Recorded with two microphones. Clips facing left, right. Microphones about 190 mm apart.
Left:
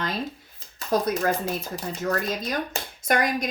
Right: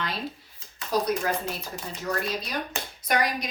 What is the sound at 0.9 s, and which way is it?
A woman's voice, 50° left (ahead or behind).